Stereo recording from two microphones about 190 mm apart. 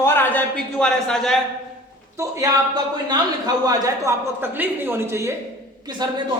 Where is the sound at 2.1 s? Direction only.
15° right (ahead or behind).